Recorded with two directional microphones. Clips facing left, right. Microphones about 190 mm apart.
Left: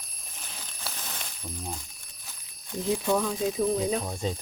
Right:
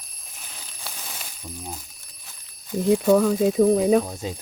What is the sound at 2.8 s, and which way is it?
Speech, 60° right (ahead or behind).